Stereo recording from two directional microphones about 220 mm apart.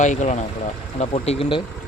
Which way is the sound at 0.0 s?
35° left (ahead or behind).